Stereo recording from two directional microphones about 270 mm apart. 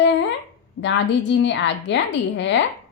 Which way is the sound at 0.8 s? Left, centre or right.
Left.